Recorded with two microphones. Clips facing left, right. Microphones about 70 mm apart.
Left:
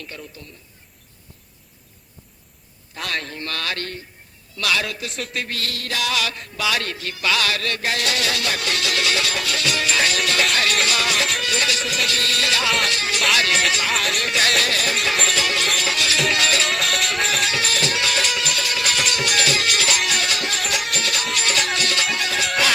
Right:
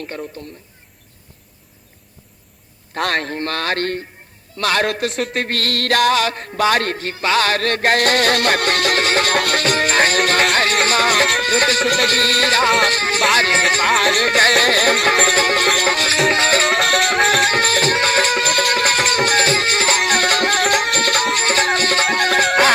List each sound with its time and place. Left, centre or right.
0.0 s a man's voice: right
2.9 s a man's voice: right